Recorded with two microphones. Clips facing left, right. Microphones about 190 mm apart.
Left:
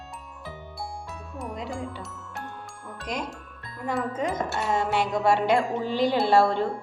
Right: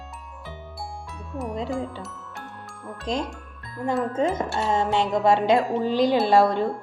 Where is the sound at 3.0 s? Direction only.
25° right (ahead or behind).